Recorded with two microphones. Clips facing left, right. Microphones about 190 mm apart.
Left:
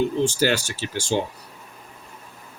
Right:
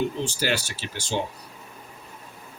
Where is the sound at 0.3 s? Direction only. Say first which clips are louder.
Left 5 dB; 45° left (ahead or behind).